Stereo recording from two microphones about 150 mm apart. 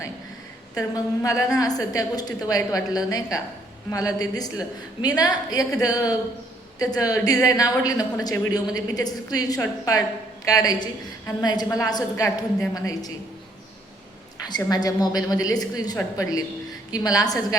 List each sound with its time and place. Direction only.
0.8 s a woman's voice: 20° left (ahead or behind)
14.4 s a woman's voice: 25° left (ahead or behind)